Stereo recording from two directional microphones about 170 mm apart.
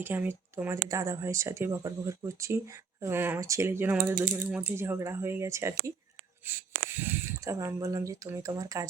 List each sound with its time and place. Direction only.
0.0 s speech: 10° right (ahead or behind)